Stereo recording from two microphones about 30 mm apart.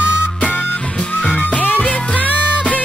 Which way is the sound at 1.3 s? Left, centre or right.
Left.